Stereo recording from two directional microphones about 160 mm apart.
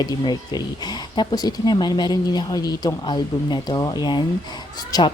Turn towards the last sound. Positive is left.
turn(degrees=25)  # may be behind; listen again after turning